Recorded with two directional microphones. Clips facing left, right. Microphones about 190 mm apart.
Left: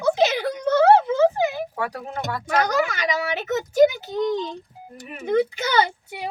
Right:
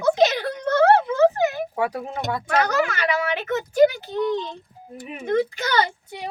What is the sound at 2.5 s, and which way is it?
Speech, 10° left (ahead or behind).